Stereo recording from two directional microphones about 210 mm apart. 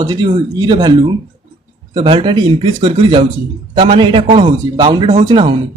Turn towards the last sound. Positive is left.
turn(degrees=-25)  # may be behind; listen again after turning